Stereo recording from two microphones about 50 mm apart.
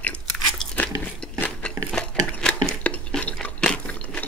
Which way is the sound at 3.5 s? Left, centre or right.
Centre.